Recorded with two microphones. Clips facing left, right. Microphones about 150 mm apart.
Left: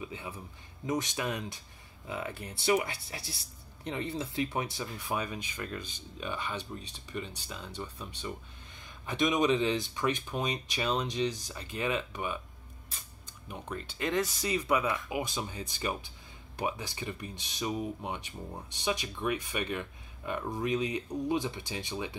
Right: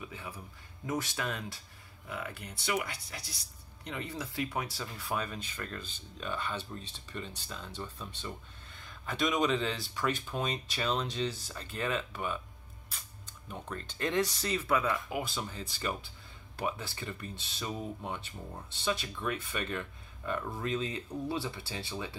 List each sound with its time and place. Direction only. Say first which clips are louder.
0.0 s speech: left 3 dB; 20° left (ahead or behind)
13.5 s speech: left 2 dB; 10° left (ahead or behind)
14.5 s speech: left 3 dB; 15° left (ahead or behind)